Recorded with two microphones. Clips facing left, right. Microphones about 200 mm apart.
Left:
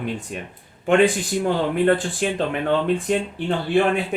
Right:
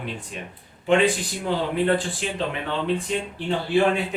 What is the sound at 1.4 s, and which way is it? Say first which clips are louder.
Speech: left 4 dB; 50° left (ahead or behind).